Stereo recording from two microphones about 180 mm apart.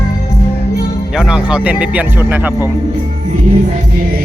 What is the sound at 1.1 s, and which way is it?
Speech, 5° right (ahead or behind).